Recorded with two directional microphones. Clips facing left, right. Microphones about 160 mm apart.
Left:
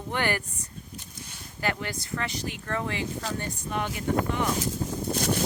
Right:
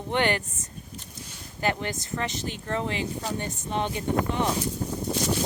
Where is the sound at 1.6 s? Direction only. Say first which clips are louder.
Right 3 dB; 20° right (ahead or behind).